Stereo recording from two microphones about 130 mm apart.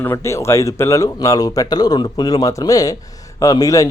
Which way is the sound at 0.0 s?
20° left (ahead or behind).